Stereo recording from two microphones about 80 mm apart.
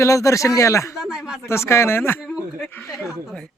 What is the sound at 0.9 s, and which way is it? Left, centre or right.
Speech, centre.